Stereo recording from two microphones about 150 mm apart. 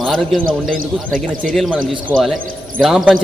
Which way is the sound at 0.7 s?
65° right (ahead or behind).